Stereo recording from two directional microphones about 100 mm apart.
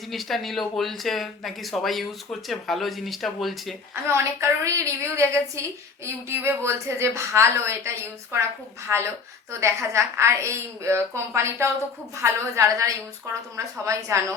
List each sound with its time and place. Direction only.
0.1 s speech: centre (ahead or behind)
4.0 s a woman's voice: 25° right (ahead or behind)